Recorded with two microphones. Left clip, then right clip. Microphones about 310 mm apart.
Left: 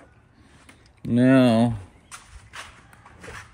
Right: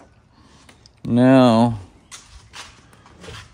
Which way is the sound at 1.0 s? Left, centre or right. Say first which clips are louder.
Right 4 dB; centre.